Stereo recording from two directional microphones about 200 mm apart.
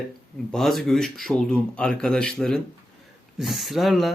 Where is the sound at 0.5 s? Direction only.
Centre (ahead or behind).